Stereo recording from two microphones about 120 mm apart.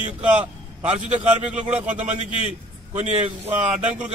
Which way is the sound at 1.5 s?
10° right (ahead or behind).